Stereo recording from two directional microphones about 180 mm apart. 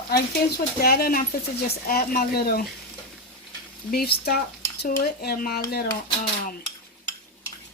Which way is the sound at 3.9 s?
60° left (ahead or behind).